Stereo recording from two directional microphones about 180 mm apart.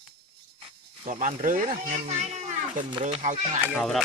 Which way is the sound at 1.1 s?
45° right (ahead or behind).